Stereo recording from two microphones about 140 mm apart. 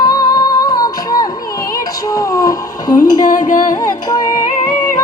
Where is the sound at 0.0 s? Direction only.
30° left (ahead or behind).